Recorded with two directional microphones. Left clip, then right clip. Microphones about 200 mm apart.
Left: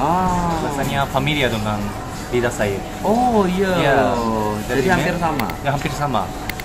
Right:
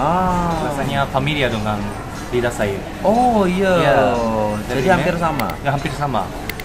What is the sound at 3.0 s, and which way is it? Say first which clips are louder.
Speech: right 3 dB; 15° right (ahead or behind).